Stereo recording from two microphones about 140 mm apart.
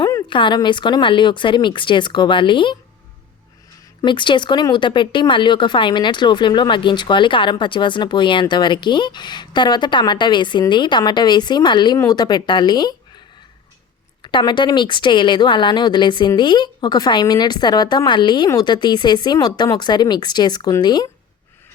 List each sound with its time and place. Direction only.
0.0 s speech: 30° left (ahead or behind)
4.0 s speech: 35° left (ahead or behind)
14.2 s speech: 35° left (ahead or behind)